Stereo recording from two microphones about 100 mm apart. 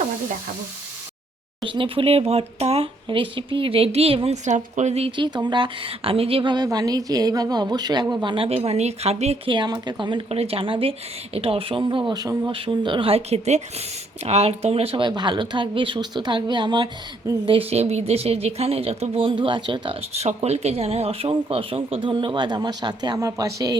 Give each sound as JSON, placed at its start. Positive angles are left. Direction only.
{"t": 1.6, "sound": "speech", "side_deg": -60}
{"t": 5.1, "sound": "speech", "side_deg": -50}
{"t": 6.7, "sound": "a woman's voice", "side_deg": -40}
{"t": 8.4, "sound": "speech", "side_deg": -90}
{"t": 9.5, "sound": "speech", "side_deg": -50}
{"t": 10.2, "sound": "speech", "side_deg": -85}
{"t": 12.1, "sound": "a woman's voice", "side_deg": -40}
{"t": 12.5, "sound": "speech", "side_deg": -60}
{"t": 13.1, "sound": "speech", "side_deg": -90}
{"t": 15.0, "sound": "speech", "side_deg": -50}
{"t": 17.4, "sound": "speech", "side_deg": -65}
{"t": 20.0, "sound": "speech", "side_deg": -90}
{"t": 23.2, "sound": "a woman's voice", "side_deg": -35}